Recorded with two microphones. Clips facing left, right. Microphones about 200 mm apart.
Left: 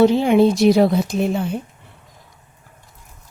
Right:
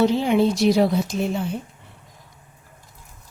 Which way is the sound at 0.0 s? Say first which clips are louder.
Left 5 dB; 55° left (ahead or behind).